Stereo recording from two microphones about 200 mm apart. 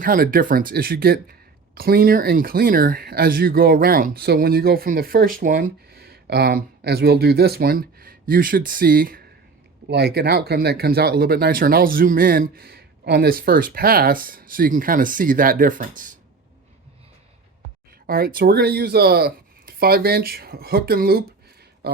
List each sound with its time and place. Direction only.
0.0 s speech: 45° right (ahead or behind)
18.0 s speech: 50° right (ahead or behind)